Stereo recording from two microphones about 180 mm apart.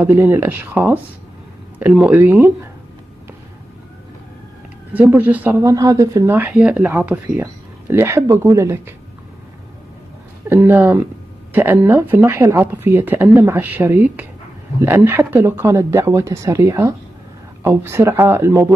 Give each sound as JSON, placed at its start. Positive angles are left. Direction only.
{"t": 0.0, "sound": "speech", "side_deg": -15}
{"t": 4.9, "sound": "speech", "side_deg": -10}
{"t": 10.5, "sound": "speech", "side_deg": -10}